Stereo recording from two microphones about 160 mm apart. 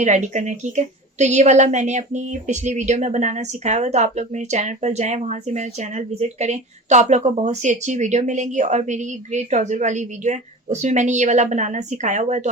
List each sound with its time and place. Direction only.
0.0 s a woman's voice: 50° right (ahead or behind)